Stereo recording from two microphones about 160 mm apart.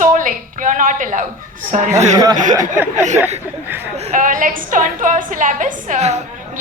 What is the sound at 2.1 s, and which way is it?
Speech, 25° right (ahead or behind).